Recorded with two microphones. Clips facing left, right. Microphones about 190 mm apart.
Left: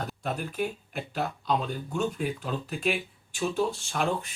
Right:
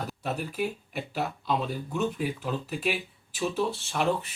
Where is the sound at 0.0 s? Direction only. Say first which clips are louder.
Even; 5° right (ahead or behind).